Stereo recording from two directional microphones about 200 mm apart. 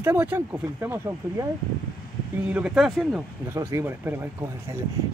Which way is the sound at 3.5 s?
15° right (ahead or behind).